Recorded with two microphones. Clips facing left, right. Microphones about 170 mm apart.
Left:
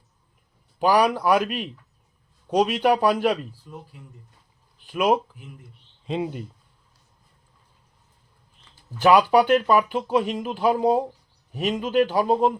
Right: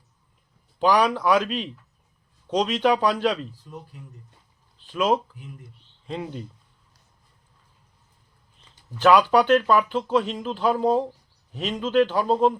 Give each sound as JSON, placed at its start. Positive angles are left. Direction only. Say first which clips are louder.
{"t": 0.8, "sound": "speech", "louder": "left 1 dB", "side_deg": 10}
{"t": 4.8, "sound": "speech", "louder": "left 1 dB", "side_deg": 10}
{"t": 9.0, "sound": "speech", "louder": "left 1 dB", "side_deg": 10}